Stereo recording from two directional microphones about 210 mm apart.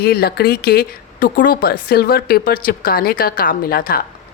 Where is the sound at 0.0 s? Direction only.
45° left (ahead or behind).